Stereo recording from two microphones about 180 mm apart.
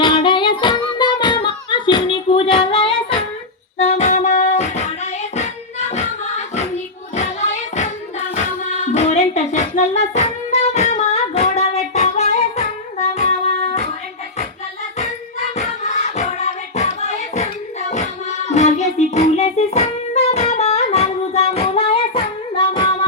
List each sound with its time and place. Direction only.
0.0 s singing: 25° left (ahead or behind)
3.8 s music: 35° left (ahead or behind)
5.9 s music: 40° left (ahead or behind)
7.8 s a sound: 40° left (ahead or behind)
14.9 s music: 40° left (ahead or behind)